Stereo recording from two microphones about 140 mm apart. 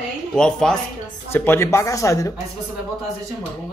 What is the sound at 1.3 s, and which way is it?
Speech, 15° left (ahead or behind).